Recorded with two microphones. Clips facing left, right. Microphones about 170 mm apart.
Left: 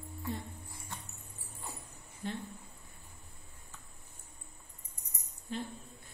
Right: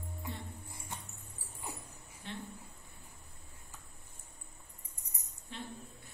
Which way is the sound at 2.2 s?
40° left (ahead or behind).